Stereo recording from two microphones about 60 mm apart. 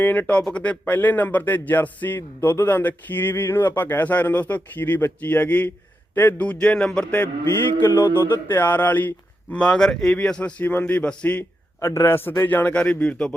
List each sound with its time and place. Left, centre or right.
0.0 s a man's voice: left
6.1 s a man's voice: left
6.4 s speech: centre
7.1 s a man's voice: left
9.5 s speech: centre
10.6 s speech: left
11.8 s a man's voice: left
12.5 s speech: left
12.8 s speech: centre